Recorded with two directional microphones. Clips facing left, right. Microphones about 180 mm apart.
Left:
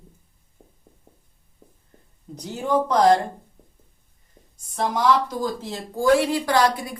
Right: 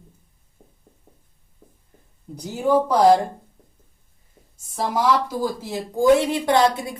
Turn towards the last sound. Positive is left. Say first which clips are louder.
# right 2 dB
turn(degrees=-25)  # may be behind; listen again after turning